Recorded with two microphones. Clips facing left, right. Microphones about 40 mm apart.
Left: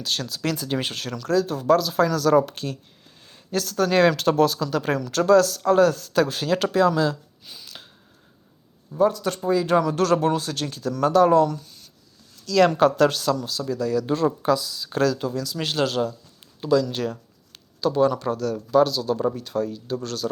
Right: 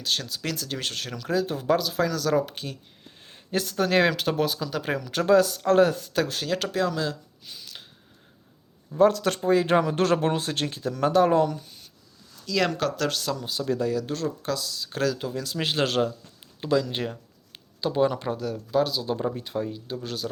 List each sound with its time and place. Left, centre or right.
0.0 s speech: centre
0.5 s speech: centre
0.9 s speech: centre
1.9 s speech: centre
3.2 s speech: right
6.1 s speech: centre
9.0 s speech: right
9.5 s speech: right; by 11.9 s centre
12.7 s speech: centre
13.1 s speech: centre
13.4 s speech: right
14.1 s speech: centre
14.4 s speech: centre
15.8 s speech: right; by 20.3 s centre